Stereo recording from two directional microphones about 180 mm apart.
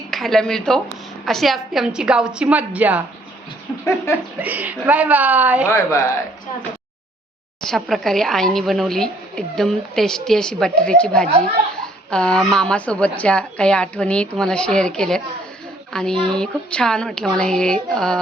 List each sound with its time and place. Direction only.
0.1 s a woman's voice: centre (ahead or behind)
4.4 s speech: 10° right (ahead or behind)
5.6 s speech: 15° left (ahead or behind)
7.6 s a woman's voice: centre (ahead or behind)